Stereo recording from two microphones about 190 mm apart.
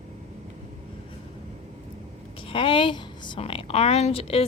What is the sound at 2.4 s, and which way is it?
A woman's voice, 30° left (ahead or behind).